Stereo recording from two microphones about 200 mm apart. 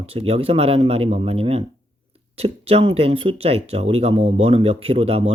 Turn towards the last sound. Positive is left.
turn(degrees=-30)  # may be behind; listen again after turning